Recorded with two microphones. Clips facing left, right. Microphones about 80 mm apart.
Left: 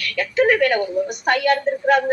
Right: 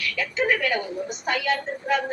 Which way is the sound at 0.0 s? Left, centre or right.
Left.